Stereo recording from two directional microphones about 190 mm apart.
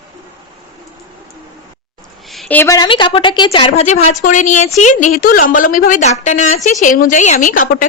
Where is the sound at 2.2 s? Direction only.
Centre (ahead or behind).